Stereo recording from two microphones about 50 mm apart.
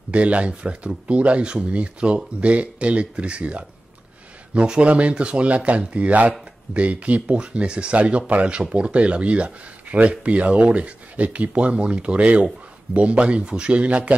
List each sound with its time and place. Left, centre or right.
0.1 s speech: right